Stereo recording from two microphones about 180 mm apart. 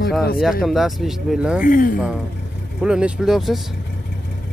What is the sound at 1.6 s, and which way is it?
Speech, 50° left (ahead or behind).